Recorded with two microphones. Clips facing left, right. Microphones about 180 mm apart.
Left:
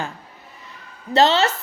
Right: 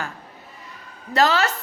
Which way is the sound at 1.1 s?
25° left (ahead or behind).